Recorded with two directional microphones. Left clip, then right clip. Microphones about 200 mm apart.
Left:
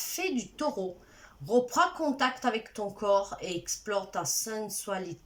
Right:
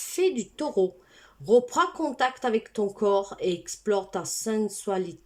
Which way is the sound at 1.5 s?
45° right (ahead or behind).